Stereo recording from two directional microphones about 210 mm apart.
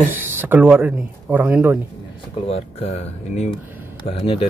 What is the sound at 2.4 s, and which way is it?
Speech, 30° left (ahead or behind).